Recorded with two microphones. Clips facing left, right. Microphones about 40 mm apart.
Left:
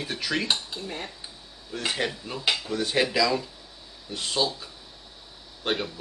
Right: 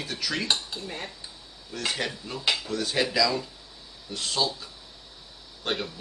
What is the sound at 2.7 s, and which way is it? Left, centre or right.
A man's voice, centre.